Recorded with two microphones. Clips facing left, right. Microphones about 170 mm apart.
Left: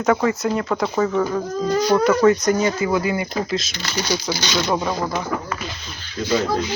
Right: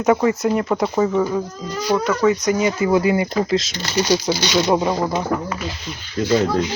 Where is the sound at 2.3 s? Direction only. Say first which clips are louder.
Even; 10° right (ahead or behind).